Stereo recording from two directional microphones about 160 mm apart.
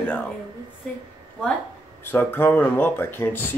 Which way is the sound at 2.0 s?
10° left (ahead or behind).